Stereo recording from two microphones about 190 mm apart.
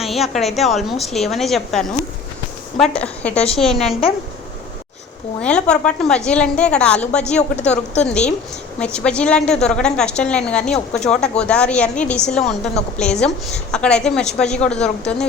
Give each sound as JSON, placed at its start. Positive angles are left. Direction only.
{"t": 0.0, "sound": "a woman's voice", "side_deg": 0}
{"t": 5.4, "sound": "a woman's voice", "side_deg": 5}
{"t": 7.6, "sound": "a woman's voice", "side_deg": 35}
{"t": 8.0, "sound": "a woman's voice", "side_deg": 5}